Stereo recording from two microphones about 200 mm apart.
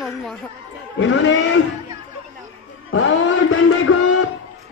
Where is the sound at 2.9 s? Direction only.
80° left.